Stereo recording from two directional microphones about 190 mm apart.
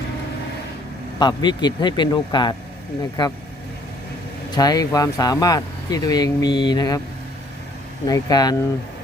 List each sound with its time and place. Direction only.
1.2 s speech: 25° left (ahead or behind)
4.5 s speech: 20° left (ahead or behind)
8.0 s speech: 20° left (ahead or behind)